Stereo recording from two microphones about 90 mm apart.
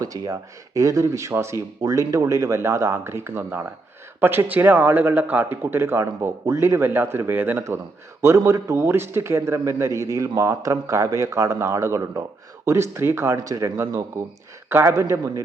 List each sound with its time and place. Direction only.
0.0 s a man's voice: 40° right (ahead or behind); by 7.6 s 20° right (ahead or behind)
8.2 s a man's voice: 30° right (ahead or behind)